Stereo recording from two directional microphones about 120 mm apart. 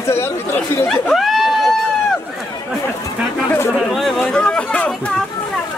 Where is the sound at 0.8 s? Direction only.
Centre (ahead or behind).